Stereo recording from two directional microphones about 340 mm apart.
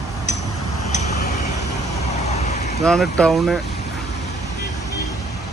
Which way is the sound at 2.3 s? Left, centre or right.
Centre.